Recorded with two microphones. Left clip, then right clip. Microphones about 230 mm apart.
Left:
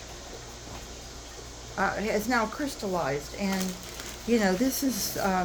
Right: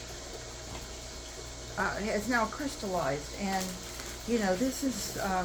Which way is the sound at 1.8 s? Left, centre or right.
Left.